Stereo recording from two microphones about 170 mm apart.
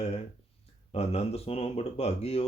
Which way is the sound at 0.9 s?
35° left (ahead or behind).